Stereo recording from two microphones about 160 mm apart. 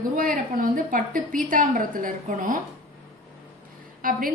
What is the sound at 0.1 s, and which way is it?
A woman's voice, 60° right (ahead or behind).